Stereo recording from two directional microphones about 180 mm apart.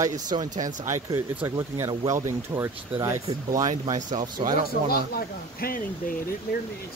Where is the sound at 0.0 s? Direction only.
20° right (ahead or behind).